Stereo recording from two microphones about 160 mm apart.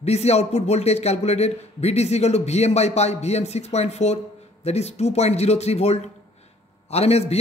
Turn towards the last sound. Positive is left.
turn(degrees=40)  # may be behind; listen again after turning